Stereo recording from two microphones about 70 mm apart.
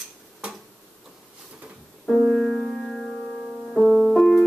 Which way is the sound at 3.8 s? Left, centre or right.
Centre.